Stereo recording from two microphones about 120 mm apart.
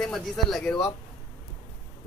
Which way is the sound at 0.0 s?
Centre (ahead or behind).